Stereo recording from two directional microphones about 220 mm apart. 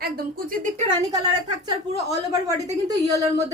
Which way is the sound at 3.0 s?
15° right (ahead or behind).